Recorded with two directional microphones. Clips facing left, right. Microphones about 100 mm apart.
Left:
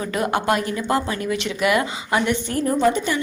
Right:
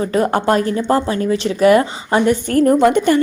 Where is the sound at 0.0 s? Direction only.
35° right (ahead or behind).